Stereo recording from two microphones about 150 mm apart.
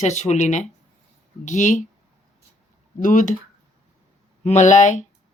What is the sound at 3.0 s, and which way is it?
Speech, 60° left (ahead or behind).